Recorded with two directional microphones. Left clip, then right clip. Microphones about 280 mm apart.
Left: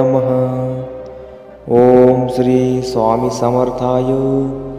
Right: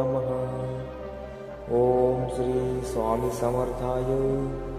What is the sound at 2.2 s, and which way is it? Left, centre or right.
Mantra, left.